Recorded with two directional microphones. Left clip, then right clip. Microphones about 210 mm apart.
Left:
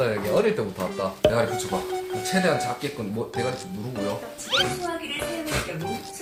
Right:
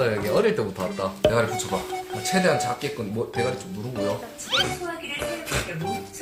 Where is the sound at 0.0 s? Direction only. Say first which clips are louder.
Even; 15° right (ahead or behind).